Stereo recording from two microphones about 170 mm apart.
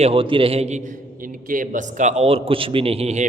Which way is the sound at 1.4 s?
50° right (ahead or behind).